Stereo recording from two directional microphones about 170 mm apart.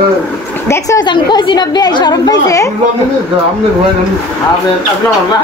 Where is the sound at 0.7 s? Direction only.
20° left (ahead or behind).